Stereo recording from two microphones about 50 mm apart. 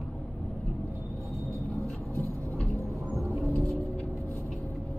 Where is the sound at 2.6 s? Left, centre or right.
Centre.